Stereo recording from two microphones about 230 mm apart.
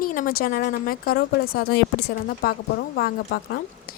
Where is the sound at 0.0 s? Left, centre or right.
Left.